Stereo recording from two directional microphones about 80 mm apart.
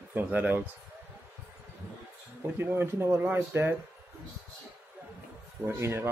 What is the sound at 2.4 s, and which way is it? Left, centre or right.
Speech, right.